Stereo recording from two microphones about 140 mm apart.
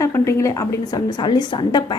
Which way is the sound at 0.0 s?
20° left (ahead or behind).